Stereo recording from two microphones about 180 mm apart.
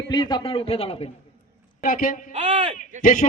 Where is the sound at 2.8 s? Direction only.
50° left (ahead or behind).